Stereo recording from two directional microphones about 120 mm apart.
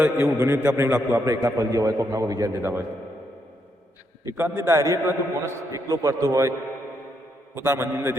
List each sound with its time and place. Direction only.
0.3 s a man's voice: 20° right (ahead or behind)
2.6 s a man's voice: 20° right (ahead or behind)
4.3 s a man's voice: 20° right (ahead or behind)
7.5 s a man's voice: 20° right (ahead or behind)